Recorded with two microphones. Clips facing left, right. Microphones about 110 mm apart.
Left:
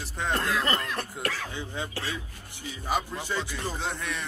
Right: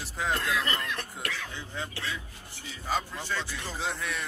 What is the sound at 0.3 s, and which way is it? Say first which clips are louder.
Speech: left 3 dB; 40° left (ahead or behind).